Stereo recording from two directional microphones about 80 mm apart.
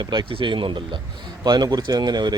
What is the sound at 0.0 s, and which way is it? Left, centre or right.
Speech, right.